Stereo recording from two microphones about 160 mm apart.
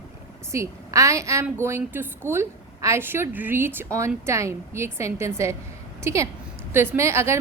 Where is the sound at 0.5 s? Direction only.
20° right (ahead or behind).